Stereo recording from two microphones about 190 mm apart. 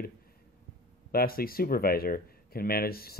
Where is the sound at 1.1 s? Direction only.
50° left (ahead or behind).